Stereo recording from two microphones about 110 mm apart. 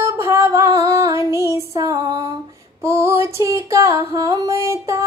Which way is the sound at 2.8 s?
25° right (ahead or behind).